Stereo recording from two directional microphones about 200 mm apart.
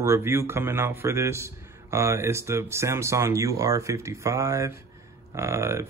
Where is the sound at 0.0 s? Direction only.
15° right (ahead or behind).